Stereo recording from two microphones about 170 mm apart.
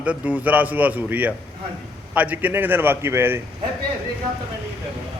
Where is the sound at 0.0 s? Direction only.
10° right (ahead or behind).